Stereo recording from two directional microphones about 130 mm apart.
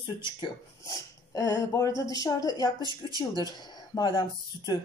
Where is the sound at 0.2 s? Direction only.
30° left (ahead or behind).